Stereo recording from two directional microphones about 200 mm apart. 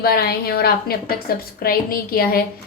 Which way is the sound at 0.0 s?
50° left (ahead or behind).